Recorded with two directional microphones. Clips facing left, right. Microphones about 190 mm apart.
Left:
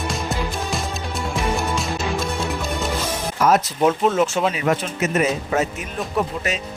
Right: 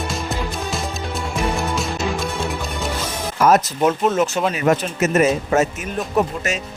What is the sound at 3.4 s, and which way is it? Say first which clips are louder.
Music: right 2 dB; 45° right (ahead or behind).